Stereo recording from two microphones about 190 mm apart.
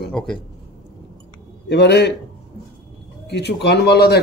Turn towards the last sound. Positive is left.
turn(degrees=60)  # may be behind; listen again after turning